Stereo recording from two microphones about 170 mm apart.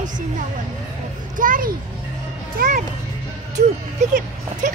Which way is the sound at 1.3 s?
50° right (ahead or behind).